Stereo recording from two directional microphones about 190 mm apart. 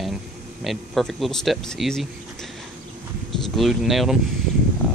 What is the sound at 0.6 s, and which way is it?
Speech, centre (ahead or behind).